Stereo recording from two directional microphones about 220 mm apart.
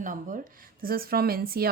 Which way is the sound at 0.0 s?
35° right (ahead or behind).